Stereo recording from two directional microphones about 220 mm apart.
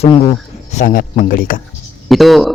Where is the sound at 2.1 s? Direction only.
Centre (ahead or behind).